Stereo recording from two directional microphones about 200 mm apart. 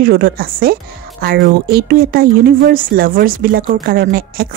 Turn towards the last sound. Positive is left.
turn(degrees=-50)  # may be behind; listen again after turning